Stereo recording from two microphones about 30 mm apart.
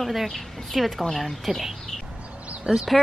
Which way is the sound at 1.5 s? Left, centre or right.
Centre.